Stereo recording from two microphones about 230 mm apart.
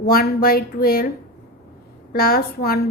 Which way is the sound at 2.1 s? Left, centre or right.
Left.